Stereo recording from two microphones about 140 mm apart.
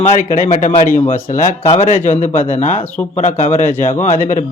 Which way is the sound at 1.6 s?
50° left (ahead or behind).